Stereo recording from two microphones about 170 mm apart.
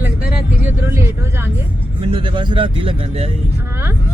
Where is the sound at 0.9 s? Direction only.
15° right (ahead or behind).